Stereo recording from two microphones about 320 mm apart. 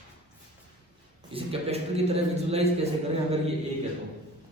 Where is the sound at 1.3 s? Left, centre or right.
Centre.